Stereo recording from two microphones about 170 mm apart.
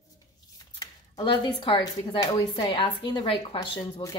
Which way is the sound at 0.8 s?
25° left (ahead or behind).